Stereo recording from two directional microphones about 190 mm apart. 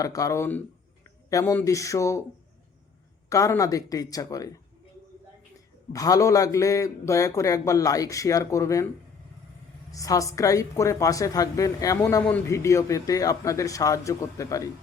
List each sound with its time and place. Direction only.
0.0 s a woman's voice: 20° left (ahead or behind)
3.2 s a woman's voice: 15° left (ahead or behind)
5.9 s a woman's voice: 20° left (ahead or behind)
9.9 s a woman's voice: 15° left (ahead or behind)